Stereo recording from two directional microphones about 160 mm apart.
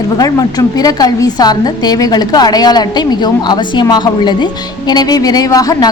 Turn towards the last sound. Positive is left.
turn(degrees=20)  # may be behind; listen again after turning